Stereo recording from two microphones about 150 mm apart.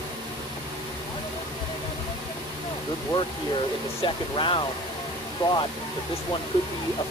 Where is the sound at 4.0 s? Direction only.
35° left (ahead or behind).